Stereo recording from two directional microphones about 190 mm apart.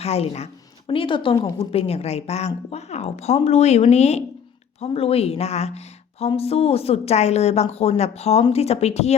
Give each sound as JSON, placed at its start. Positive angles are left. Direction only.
{"t": 0.0, "sound": "speech", "side_deg": 35}